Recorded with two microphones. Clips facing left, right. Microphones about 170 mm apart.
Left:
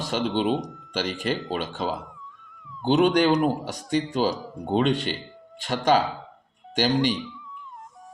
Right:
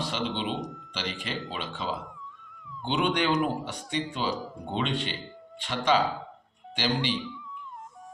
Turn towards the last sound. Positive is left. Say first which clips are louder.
# left 7 dB
turn(degrees=45)  # may be behind; listen again after turning